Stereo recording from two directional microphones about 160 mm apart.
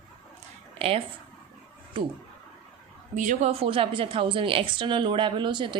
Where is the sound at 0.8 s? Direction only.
35° right (ahead or behind).